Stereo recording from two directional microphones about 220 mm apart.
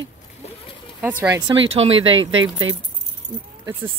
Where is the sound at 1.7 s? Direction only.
25° right (ahead or behind).